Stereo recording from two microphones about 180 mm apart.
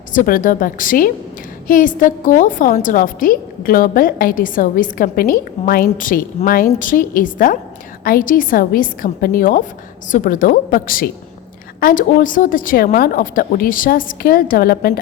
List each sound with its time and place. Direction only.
0.1 s a woman's voice: 50° left (ahead or behind)